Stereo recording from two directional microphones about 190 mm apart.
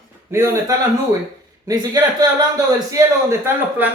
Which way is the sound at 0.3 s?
15° right (ahead or behind).